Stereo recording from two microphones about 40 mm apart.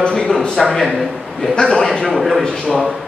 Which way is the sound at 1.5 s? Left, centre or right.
Left.